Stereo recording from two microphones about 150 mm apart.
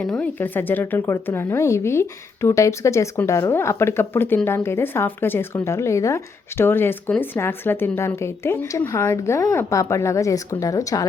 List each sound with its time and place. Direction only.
0.0 s speech: 5° left (ahead or behind); by 11.0 s 20° left (ahead or behind)